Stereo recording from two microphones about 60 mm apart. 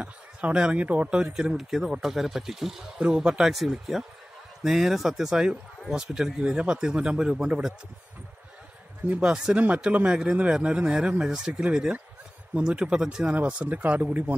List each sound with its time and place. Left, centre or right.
0.0 s speech: right
1.3 s speech: centre
9.1 s speech: centre
13.3 s speech: right